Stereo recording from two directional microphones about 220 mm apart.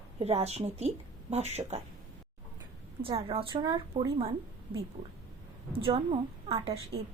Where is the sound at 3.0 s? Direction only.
25° right (ahead or behind).